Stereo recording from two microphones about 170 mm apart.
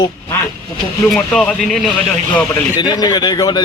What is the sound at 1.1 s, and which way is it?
Speech, centre (ahead or behind).